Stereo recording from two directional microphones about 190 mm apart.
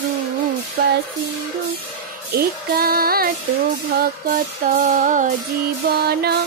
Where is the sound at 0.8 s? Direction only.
55° right (ahead or behind).